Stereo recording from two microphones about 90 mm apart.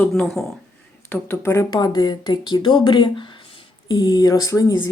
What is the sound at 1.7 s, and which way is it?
Speech, 50° left (ahead or behind).